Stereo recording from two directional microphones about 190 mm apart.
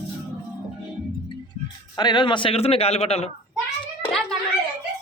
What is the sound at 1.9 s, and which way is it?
A man's voice, 20° left (ahead or behind).